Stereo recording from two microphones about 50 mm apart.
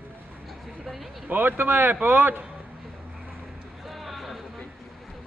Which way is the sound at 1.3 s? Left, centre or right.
Right.